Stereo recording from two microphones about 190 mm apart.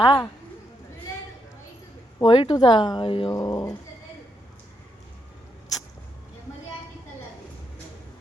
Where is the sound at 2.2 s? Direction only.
25° left (ahead or behind).